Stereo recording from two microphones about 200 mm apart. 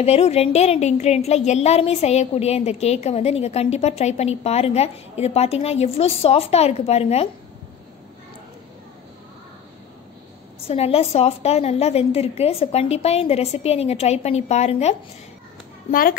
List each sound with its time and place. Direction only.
0.0 s a woman's voice: 30° left (ahead or behind)
10.7 s a woman's voice: 30° left (ahead or behind)
15.9 s a child's voice: 45° left (ahead or behind)